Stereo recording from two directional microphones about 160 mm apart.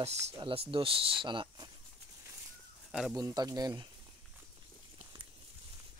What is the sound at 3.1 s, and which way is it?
Speech, 20° right (ahead or behind).